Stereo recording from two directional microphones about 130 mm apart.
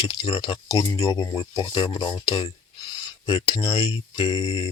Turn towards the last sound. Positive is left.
turn(degrees=35)  # may be behind; listen again after turning